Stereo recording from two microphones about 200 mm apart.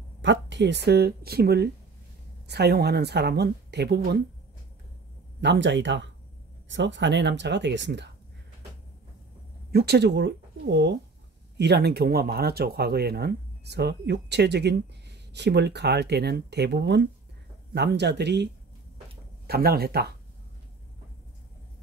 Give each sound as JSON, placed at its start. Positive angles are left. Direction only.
{"t": 0.2, "sound": "speech", "side_deg": -60}
{"t": 5.4, "sound": "speech", "side_deg": -60}
{"t": 9.7, "sound": "speech", "side_deg": -50}